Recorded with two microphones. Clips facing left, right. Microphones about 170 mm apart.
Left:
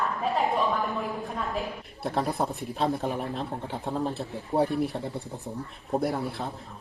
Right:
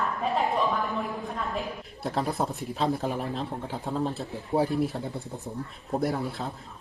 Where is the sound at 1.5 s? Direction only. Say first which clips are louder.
Left 1 dB; centre (ahead or behind).